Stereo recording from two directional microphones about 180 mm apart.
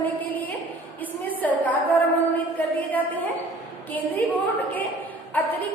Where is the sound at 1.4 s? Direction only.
10° left (ahead or behind).